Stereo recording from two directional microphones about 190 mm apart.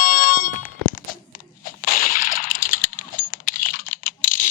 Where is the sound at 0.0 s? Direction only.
50° left (ahead or behind).